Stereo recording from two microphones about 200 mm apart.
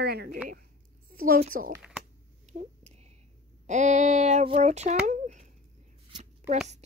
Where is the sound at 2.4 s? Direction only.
35° right (ahead or behind).